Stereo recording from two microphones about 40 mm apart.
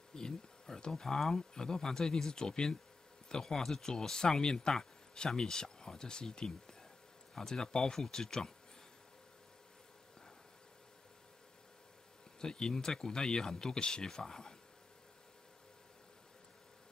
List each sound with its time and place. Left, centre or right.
0.1 s a sound: centre
1.0 s speech: centre
12.4 s speech: centre